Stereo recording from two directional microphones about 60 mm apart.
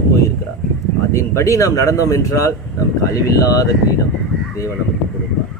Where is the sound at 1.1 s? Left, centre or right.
Left.